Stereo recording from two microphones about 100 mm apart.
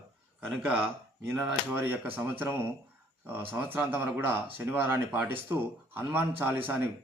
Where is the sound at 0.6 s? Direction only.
25° right (ahead or behind).